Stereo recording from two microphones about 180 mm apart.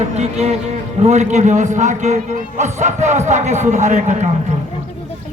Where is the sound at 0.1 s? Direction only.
40° right (ahead or behind).